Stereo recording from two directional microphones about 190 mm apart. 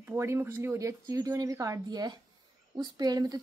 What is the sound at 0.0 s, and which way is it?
Speech, 10° right (ahead or behind).